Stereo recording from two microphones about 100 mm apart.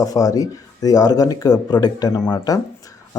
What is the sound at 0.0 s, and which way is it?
Speech, 35° left (ahead or behind).